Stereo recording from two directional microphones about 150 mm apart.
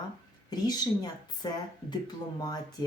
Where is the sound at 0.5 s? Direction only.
25° left (ahead or behind).